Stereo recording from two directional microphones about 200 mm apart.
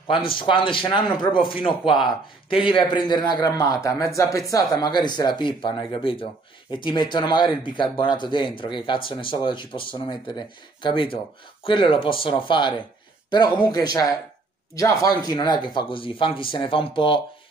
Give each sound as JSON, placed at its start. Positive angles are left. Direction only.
{"t": 0.1, "sound": "speech", "side_deg": 25}